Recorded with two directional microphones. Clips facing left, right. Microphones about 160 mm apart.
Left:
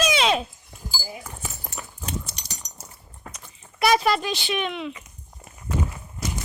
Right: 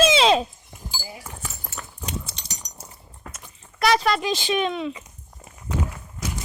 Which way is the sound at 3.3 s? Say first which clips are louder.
Right 1 dB; 5° left (ahead or behind).